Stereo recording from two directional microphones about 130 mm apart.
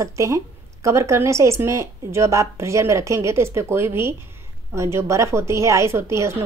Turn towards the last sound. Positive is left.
turn(degrees=-20)  # may be behind; listen again after turning